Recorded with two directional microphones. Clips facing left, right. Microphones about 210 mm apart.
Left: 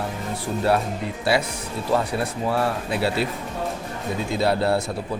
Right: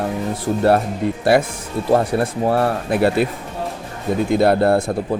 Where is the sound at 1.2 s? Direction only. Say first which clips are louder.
Right 6 dB; 50° right (ahead or behind).